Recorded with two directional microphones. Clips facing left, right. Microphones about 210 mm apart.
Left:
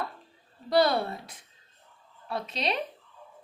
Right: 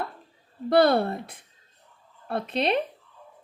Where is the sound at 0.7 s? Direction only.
55° right (ahead or behind).